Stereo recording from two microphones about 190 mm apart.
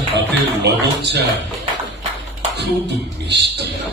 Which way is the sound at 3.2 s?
65° right (ahead or behind).